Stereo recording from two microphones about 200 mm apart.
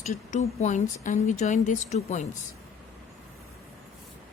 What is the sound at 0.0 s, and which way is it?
Speech, 35° left (ahead or behind).